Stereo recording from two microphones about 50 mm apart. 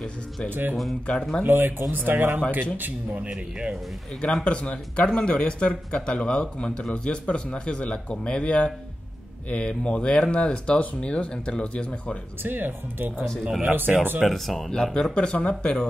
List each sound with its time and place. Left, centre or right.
0.5 s speech: right
3.2 s speech: right
4.2 s speech: centre
12.4 s speech: right
14.2 s speech: centre
14.7 s speech: centre
15.1 s speech: left